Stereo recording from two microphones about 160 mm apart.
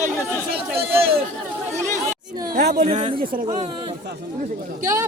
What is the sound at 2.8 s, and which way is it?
Speech, 40° right (ahead or behind).